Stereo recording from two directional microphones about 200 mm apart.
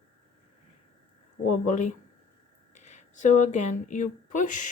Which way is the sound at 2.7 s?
35° left (ahead or behind).